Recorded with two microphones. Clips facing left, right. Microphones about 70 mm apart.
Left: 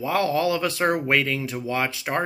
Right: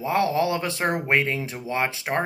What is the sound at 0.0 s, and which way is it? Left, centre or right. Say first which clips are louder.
Speech: even; right.